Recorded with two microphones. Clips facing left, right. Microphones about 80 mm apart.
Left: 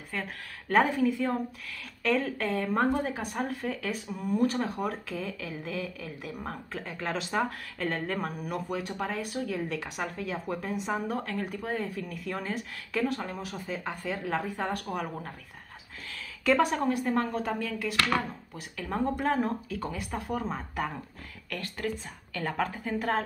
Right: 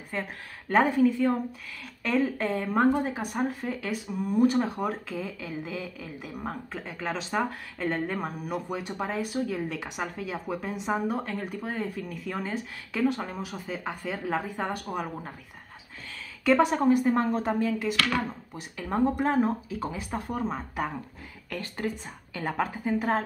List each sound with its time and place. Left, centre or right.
0.7 s a woman's voice: centre
3.3 s speech: centre
3.8 s a woman's voice: centre
8.7 s speech: centre
9.6 s a woman's voice: centre
11.1 s a woman's voice: centre
21.5 s a woman's voice: right